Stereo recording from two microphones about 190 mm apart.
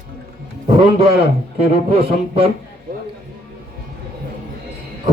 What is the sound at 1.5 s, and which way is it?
Speech, 30° right (ahead or behind).